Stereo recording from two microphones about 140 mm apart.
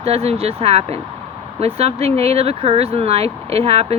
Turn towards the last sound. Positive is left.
turn(degrees=-50)  # may be behind; listen again after turning